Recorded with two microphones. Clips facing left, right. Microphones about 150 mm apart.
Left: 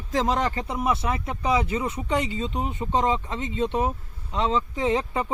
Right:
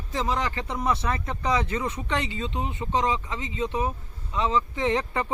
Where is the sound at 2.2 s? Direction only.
45° left (ahead or behind).